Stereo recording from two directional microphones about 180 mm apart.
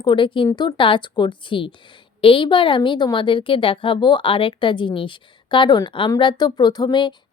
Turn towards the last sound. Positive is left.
turn(degrees=25)  # may be behind; listen again after turning